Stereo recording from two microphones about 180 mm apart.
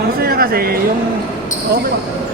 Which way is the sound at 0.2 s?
55° right (ahead or behind).